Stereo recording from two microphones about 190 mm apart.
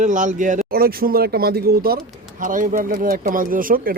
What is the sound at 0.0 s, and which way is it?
Speech, 40° right (ahead or behind).